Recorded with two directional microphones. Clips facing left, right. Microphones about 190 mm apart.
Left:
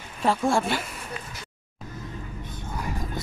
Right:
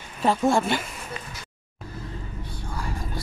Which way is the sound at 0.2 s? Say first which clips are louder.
Right 2 dB; centre (ahead or behind).